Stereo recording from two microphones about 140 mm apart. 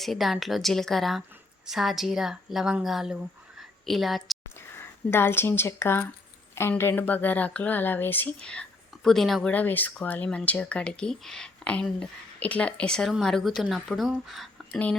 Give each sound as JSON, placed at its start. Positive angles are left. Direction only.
{"t": 0.0, "sound": "speech", "side_deg": 0}
{"t": 3.6, "sound": "a sound", "side_deg": 0}
{"t": 4.7, "sound": "speech", "side_deg": 15}